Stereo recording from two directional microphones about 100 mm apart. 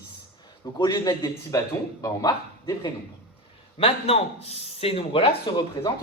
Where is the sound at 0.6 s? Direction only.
45° left (ahead or behind).